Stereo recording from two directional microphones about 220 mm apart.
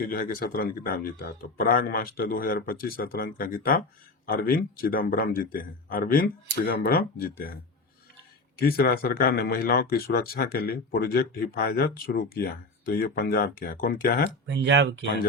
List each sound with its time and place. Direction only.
0.0 s speech: 40° left (ahead or behind)
8.5 s speech: 45° left (ahead or behind)
14.5 s speech: 55° right (ahead or behind)